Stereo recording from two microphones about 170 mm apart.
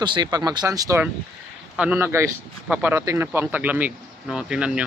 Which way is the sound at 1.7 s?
10° right (ahead or behind).